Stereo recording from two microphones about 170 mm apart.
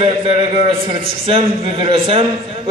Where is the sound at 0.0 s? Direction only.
35° right (ahead or behind).